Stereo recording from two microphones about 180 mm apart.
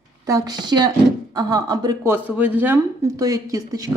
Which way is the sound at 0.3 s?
20° right (ahead or behind).